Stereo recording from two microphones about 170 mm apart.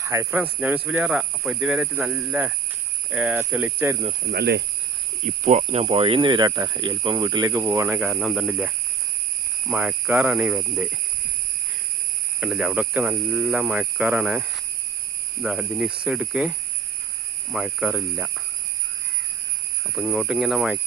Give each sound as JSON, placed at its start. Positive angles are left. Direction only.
{"t": 0.0, "sound": "speech", "side_deg": -15}
{"t": 4.3, "sound": "speech", "side_deg": -75}
{"t": 5.2, "sound": "speech", "side_deg": -40}
{"t": 12.4, "sound": "speech", "side_deg": -5}
{"t": 20.0, "sound": "speech", "side_deg": -5}